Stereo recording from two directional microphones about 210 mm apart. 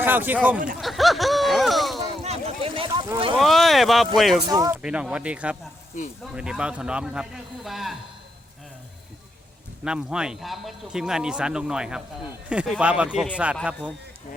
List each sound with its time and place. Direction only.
0.0 s a sound: 10° right (ahead or behind)
0.8 s speech: centre (ahead or behind)
2.2 s boat: 30° right (ahead or behind)
3.3 s speech: centre (ahead or behind)
4.4 s speech: 15° right (ahead or behind)
4.8 s speech: 5° right (ahead or behind)
9.8 s speech: 5° right (ahead or behind)